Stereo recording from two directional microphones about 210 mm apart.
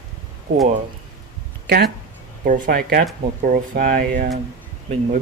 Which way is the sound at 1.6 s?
50° right (ahead or behind).